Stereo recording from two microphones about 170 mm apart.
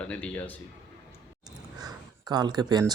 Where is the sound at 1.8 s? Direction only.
20° right (ahead or behind).